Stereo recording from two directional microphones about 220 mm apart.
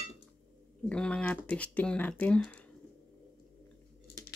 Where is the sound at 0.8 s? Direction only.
5° left (ahead or behind).